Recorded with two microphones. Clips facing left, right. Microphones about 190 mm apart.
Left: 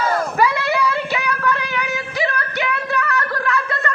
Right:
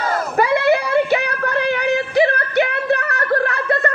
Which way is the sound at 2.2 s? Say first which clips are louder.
Right 7 dB; 55° right (ahead or behind).